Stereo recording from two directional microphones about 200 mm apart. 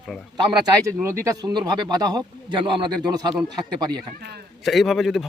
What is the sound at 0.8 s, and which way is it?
Speech, 15° right (ahead or behind).